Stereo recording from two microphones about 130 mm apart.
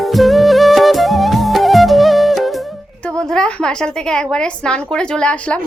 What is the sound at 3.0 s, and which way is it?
A woman's voice, 5° left (ahead or behind).